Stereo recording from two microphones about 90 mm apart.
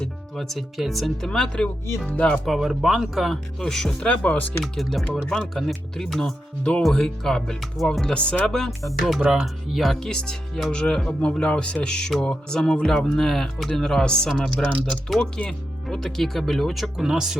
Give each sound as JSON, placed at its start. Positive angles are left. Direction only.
{"t": 0.0, "sound": "speech", "side_deg": 5}
{"t": 2.3, "sound": "speech", "side_deg": 0}
{"t": 4.6, "sound": "speech", "side_deg": 0}